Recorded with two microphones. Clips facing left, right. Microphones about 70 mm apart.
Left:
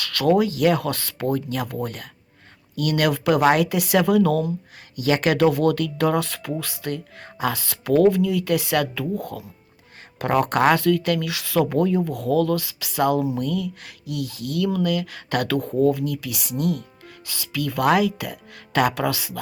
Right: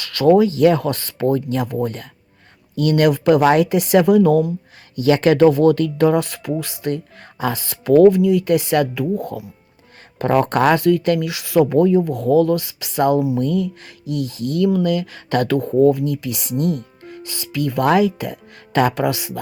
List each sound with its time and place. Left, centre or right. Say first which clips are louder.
0.0 s a sound: right 6 dB; right
0.4 s speech: right 5 dB; right
3.1 s speech: right 3 dB; right
4.9 s speech: right 6 dB; right
5.4 s speech: right 6 dB; right
7.2 s speech: right 2 dB; right
7.5 s speech: right 7 dB; right
10.2 s speech: right 4 dB; right
10.8 s speech: right 4 dB; right
13.1 s speech: right 5 dB; centre
13.4 s speech: right 5 dB; right